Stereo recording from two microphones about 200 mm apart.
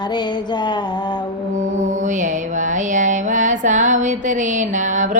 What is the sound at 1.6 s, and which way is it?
Mantra, 35° right (ahead or behind).